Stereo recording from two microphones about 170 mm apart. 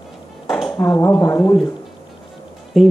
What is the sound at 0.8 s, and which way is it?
Speech, 15° left (ahead or behind).